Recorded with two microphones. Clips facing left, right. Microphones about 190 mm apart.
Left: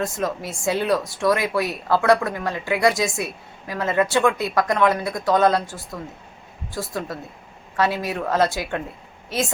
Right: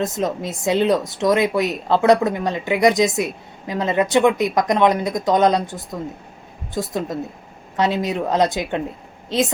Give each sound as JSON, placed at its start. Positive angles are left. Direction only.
{"t": 0.0, "sound": "speech", "side_deg": -20}